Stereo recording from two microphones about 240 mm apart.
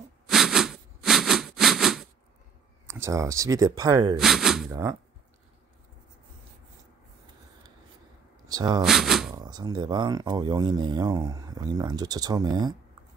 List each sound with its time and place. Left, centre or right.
0.3 s a sound: centre
2.9 s speech: centre
4.2 s speech: centre
4.6 s speech: centre
8.5 s speech: centre
8.8 s speech: centre
9.3 s speech: centre